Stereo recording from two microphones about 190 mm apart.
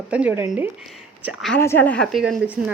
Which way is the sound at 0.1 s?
5° right (ahead or behind).